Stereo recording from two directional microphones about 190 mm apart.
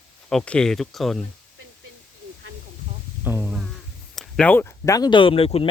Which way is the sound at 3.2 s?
10° right (ahead or behind).